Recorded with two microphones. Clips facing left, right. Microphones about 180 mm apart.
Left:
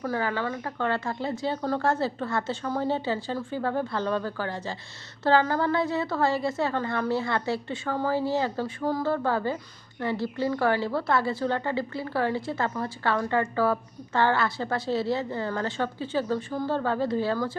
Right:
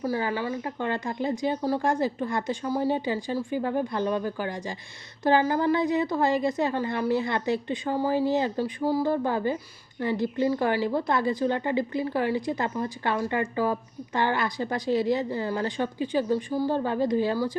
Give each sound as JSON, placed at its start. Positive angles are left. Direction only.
{"t": 0.0, "sound": "a woman's voice", "side_deg": -15}